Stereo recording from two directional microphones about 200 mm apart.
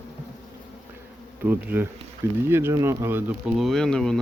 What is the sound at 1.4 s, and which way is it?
Bee, 10° right (ahead or behind).